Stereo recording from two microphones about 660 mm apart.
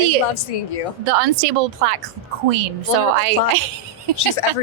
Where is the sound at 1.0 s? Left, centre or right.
Right.